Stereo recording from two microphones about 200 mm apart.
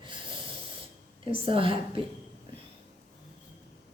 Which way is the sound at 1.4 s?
25° right (ahead or behind).